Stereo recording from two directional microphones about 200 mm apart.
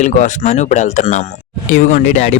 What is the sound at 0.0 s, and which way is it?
Speech, 40° left (ahead or behind).